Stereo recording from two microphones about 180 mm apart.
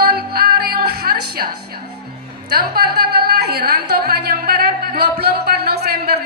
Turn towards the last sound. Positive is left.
turn(degrees=-60)  # may be behind; listen again after turning